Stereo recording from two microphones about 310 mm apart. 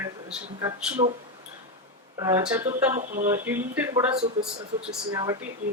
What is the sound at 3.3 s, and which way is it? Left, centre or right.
Speech, centre.